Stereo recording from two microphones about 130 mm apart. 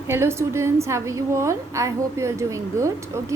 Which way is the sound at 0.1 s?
20° right (ahead or behind).